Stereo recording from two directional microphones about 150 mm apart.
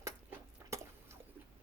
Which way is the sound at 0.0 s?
20° right (ahead or behind).